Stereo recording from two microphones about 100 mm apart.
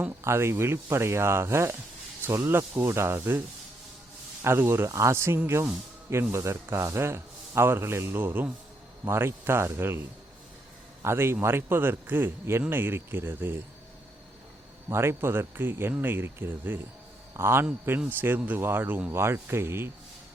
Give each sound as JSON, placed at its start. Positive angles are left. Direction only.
{"t": 0.3, "sound": "a man's voice", "side_deg": -25}
{"t": 4.4, "sound": "a man's voice", "side_deg": -25}
{"t": 14.8, "sound": "a man's voice", "side_deg": -25}